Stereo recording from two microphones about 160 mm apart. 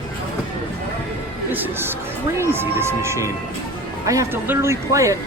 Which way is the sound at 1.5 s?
10° right (ahead or behind).